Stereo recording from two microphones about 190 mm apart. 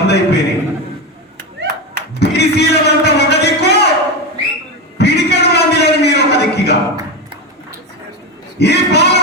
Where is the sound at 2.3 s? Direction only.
60° left (ahead or behind).